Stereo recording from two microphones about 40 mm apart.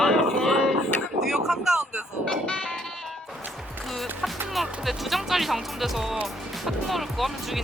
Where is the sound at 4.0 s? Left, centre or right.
Centre.